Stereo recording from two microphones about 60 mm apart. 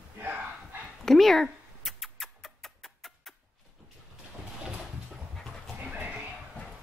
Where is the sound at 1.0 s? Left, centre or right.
Centre.